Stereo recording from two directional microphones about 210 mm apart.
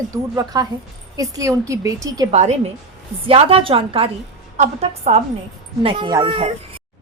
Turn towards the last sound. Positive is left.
turn(degrees=-25)  # may be behind; listen again after turning